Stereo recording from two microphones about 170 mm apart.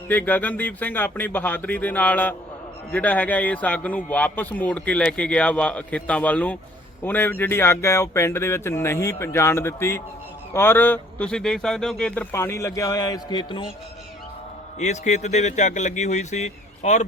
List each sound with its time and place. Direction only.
0.1 s speech: 10° left (ahead or behind); by 13.7 s 25° left (ahead or behind)
14.8 s speech: 45° left (ahead or behind)